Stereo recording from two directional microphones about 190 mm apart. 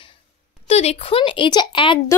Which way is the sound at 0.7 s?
30° left (ahead or behind).